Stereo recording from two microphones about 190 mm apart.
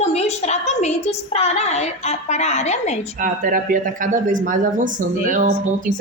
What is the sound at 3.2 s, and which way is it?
Speech, 45° right (ahead or behind).